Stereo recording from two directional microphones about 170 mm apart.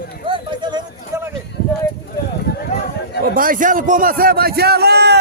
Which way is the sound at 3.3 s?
55° right (ahead or behind).